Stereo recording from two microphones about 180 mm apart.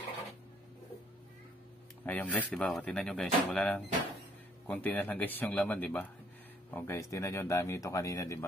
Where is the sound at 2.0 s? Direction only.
10° left (ahead or behind).